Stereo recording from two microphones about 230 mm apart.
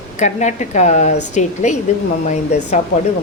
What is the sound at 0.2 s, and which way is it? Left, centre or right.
A woman's voice, left.